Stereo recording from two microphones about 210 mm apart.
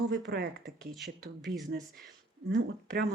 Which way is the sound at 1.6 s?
45° right (ahead or behind).